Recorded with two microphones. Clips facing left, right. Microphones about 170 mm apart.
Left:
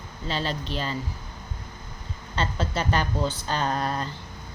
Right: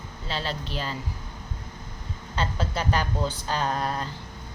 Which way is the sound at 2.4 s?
10° right (ahead or behind).